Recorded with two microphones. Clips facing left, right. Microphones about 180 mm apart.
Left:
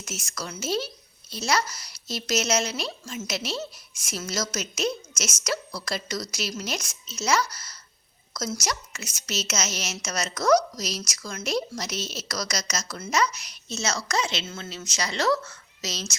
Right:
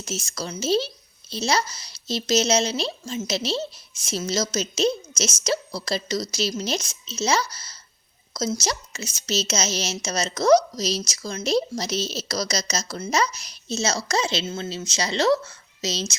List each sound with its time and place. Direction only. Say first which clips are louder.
0.0 s a woman's voice: right 5 dB; 30° right (ahead or behind)